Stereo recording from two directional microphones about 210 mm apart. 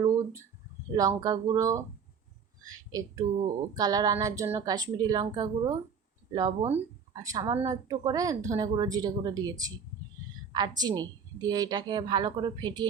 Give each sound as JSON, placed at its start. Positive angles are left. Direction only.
{"t": 0.9, "sound": "a woman's voice", "side_deg": -15}